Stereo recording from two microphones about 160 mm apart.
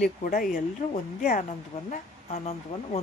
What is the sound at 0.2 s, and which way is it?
Speech, 60° left (ahead or behind).